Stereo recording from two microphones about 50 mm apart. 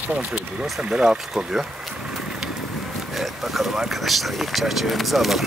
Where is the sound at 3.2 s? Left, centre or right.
Centre.